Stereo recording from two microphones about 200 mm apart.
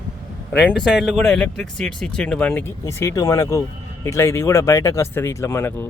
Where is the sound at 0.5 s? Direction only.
5° left (ahead or behind).